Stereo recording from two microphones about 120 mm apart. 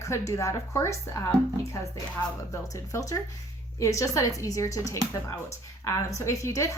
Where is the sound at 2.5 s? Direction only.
25° left (ahead or behind).